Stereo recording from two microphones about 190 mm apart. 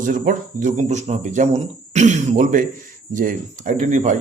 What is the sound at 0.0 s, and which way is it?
Speech, 45° right (ahead or behind).